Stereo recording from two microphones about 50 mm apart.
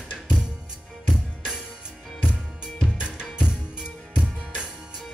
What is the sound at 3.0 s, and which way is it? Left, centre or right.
Drum, centre.